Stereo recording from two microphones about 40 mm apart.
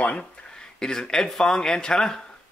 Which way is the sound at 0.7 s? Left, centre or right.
Centre.